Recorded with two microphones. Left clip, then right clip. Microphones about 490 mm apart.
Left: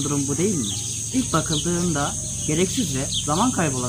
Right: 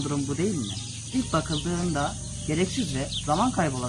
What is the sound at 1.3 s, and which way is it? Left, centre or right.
Insect, right.